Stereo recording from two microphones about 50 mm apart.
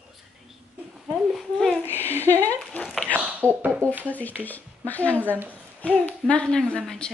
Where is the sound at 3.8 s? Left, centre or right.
Left.